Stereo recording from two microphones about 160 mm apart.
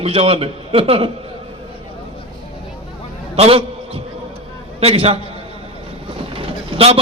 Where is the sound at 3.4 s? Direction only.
40° right (ahead or behind).